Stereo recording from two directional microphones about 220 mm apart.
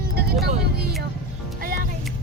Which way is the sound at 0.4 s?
45° right (ahead or behind).